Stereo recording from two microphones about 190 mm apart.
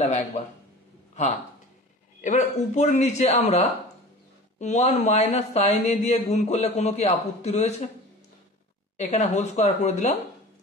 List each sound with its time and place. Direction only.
0.0 s speech: 35° left (ahead or behind)
2.2 s speech: 40° left (ahead or behind)
8.9 s speech: 35° left (ahead or behind)